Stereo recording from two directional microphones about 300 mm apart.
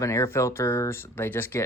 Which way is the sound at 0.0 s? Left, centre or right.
Centre.